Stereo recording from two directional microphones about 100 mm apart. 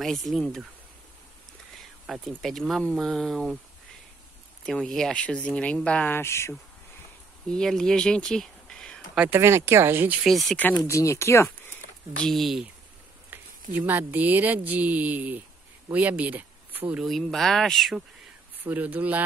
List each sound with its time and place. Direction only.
0.0 s speech: centre (ahead or behind)
2.0 s speech: centre (ahead or behind)
4.6 s speech: 5° left (ahead or behind); by 6.5 s 25° left (ahead or behind)
7.4 s speech: 5° left (ahead or behind)
9.3 s speech: 25° right (ahead or behind)
10.2 s speech: centre (ahead or behind)
10.9 s speech: 30° left (ahead or behind)
12.2 s speech: 5° left (ahead or behind)
13.3 s speech: 20° right (ahead or behind)
17.0 s speech: centre (ahead or behind)
18.6 s speech: 20° right (ahead or behind)